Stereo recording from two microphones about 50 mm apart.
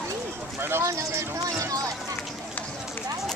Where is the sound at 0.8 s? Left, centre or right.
Right.